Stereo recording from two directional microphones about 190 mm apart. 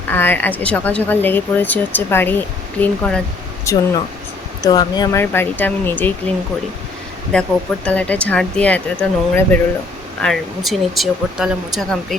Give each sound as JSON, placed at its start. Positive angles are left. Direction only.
{"t": 0.1, "sound": "speech", "side_deg": 10}